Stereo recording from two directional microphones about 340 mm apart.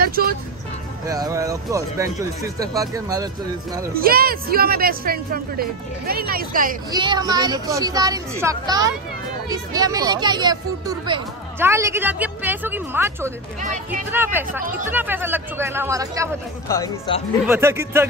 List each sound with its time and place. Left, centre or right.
0.0 s speech: right
1.0 s speech: centre
3.9 s speech: right
6.9 s speech: centre
16.6 s speech: centre
17.5 s speech: centre